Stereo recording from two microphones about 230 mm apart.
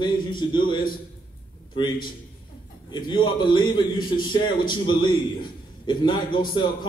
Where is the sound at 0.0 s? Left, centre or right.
Centre.